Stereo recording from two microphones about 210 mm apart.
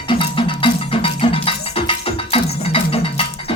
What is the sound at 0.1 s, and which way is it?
Music, 25° left (ahead or behind).